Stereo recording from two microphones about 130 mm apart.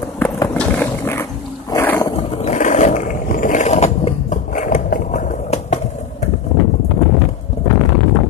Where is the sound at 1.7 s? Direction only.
20° left (ahead or behind).